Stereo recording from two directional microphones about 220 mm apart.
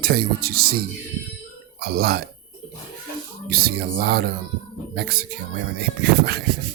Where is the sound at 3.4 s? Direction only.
45° right (ahead or behind).